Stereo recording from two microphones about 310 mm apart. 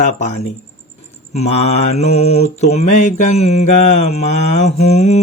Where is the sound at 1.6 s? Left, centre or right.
Left.